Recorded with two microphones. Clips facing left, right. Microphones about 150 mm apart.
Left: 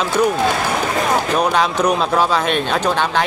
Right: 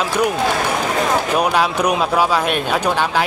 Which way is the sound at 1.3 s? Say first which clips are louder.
Even; 10° right (ahead or behind).